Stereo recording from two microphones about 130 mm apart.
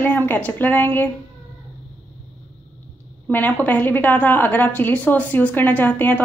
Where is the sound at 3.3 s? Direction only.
15° left (ahead or behind).